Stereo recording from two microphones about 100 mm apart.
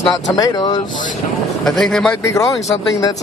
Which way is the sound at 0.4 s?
40° left (ahead or behind).